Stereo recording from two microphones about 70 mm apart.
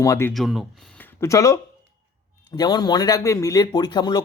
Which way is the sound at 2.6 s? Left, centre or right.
Left.